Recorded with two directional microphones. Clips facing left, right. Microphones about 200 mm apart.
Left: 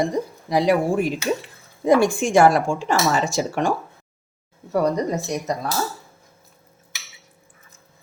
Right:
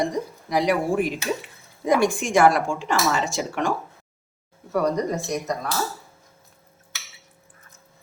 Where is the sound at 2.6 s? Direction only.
40° left (ahead or behind).